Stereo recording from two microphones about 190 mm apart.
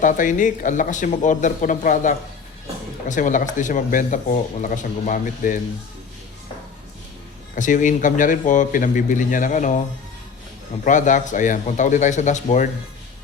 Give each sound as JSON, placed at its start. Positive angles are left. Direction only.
{"t": 0.0, "sound": "speech", "side_deg": 40}
{"t": 7.5, "sound": "speech", "side_deg": 40}
{"t": 10.8, "sound": "speech", "side_deg": 40}